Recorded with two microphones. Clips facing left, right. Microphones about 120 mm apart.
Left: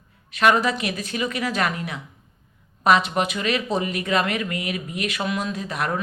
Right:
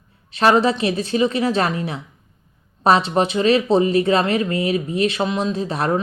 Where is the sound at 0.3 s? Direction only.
30° right (ahead or behind).